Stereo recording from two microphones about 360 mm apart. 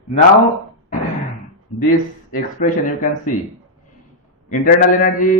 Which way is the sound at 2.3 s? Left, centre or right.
Left.